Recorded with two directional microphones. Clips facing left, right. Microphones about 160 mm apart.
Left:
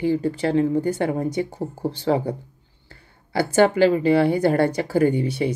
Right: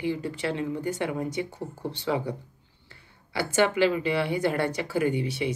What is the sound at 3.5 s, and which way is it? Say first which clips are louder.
Speech: left 6 dB; 40° left (ahead or behind).